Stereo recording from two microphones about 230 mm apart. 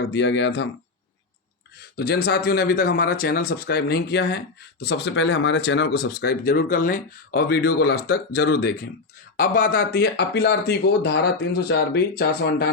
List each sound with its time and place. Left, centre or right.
0.0 s speech: left
2.0 s speech: left